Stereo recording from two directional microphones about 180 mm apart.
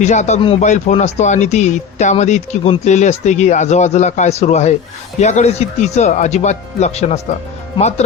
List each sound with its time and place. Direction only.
0.0 s speech: 40° left (ahead or behind)